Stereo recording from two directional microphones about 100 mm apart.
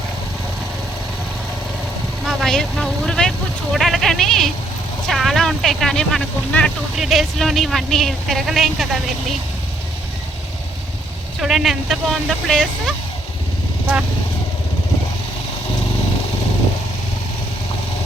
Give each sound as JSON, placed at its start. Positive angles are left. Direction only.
{"t": 2.2, "sound": "speech", "side_deg": 5}
{"t": 6.9, "sound": "speech", "side_deg": 0}
{"t": 11.3, "sound": "speech", "side_deg": 0}